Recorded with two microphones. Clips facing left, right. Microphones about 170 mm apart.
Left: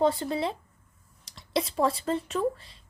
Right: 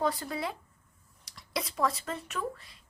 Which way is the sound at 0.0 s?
25° left (ahead or behind).